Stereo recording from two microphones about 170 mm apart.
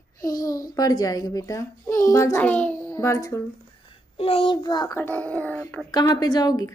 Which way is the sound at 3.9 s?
35° left (ahead or behind).